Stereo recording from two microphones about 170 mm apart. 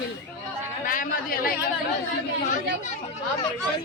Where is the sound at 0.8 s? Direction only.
55° left (ahead or behind).